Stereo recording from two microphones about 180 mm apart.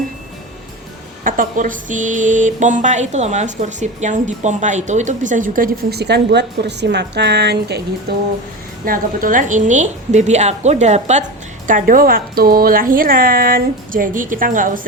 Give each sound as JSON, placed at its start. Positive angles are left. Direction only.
{"t": 1.2, "sound": "speech", "side_deg": -50}
{"t": 8.1, "sound": "a sound", "side_deg": -60}
{"t": 8.8, "sound": "a woman's voice", "side_deg": -50}
{"t": 11.7, "sound": "speech", "side_deg": -50}